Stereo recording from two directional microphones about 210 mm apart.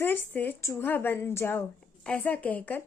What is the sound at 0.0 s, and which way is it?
A woman's voice, 10° left (ahead or behind).